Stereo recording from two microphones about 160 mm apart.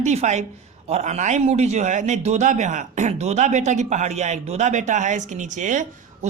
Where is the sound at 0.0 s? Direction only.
45° right (ahead or behind).